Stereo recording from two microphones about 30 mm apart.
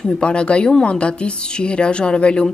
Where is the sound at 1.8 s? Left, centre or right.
Left.